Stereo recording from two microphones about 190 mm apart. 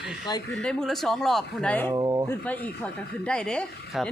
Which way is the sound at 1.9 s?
20° right (ahead or behind).